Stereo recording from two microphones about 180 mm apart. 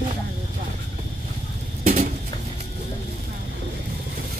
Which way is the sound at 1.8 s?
40° right (ahead or behind).